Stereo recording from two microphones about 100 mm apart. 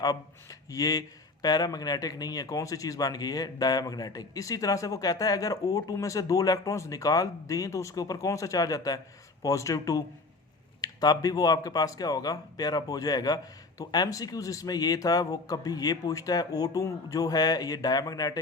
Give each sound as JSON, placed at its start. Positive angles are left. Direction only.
{"t": 0.7, "sound": "speech", "side_deg": 35}